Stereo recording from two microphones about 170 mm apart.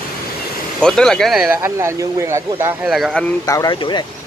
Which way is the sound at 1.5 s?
15° right (ahead or behind).